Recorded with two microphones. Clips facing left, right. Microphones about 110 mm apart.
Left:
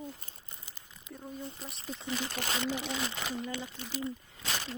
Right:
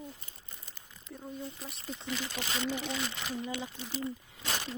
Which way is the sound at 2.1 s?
45° left (ahead or behind).